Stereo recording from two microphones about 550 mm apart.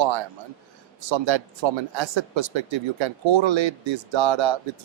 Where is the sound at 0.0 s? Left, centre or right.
Right.